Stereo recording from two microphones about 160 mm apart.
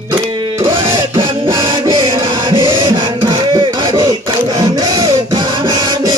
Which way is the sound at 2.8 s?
30° right (ahead or behind).